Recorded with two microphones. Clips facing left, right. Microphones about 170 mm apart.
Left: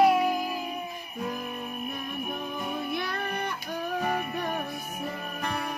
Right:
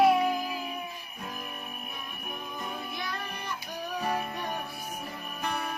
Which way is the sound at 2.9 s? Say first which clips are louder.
Left 6 dB; 55° left (ahead or behind).